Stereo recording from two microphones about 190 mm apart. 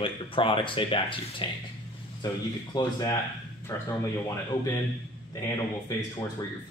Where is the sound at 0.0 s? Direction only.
25° left (ahead or behind).